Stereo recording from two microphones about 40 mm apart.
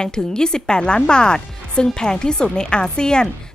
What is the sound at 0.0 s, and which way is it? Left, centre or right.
A woman's voice, centre.